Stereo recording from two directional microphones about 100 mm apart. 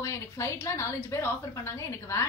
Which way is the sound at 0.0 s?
30° left (ahead or behind).